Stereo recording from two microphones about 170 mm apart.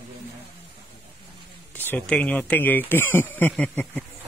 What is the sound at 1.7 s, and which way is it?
Speech, 10° left (ahead or behind).